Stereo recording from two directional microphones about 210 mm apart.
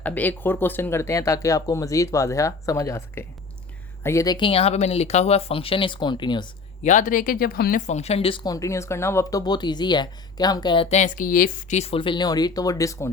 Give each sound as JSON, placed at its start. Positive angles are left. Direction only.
{"t": 0.0, "sound": "speech", "side_deg": 10}
{"t": 6.8, "sound": "speech", "side_deg": 35}